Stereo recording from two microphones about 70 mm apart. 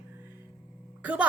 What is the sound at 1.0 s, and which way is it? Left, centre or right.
Speech, right.